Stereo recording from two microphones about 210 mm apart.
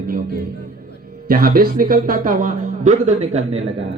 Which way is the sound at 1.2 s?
45° right (ahead or behind).